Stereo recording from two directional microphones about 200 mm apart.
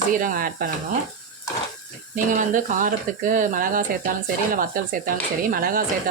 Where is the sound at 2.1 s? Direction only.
40° right (ahead or behind).